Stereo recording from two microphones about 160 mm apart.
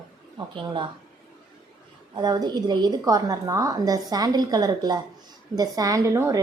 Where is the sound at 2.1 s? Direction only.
25° right (ahead or behind).